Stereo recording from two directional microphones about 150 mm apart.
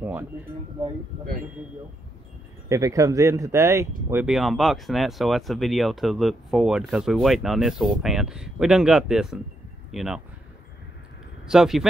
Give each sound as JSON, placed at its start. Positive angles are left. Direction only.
{"t": 0.0, "sound": "speech", "side_deg": -10}
{"t": 2.7, "sound": "speech", "side_deg": -20}
{"t": 4.1, "sound": "speech", "side_deg": -5}
{"t": 11.4, "sound": "speech", "side_deg": -5}